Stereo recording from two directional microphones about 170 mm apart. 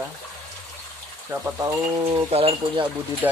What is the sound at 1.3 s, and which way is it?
Speech, 15° right (ahead or behind).